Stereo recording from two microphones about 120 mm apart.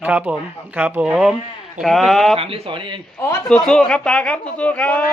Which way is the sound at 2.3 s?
50° right (ahead or behind).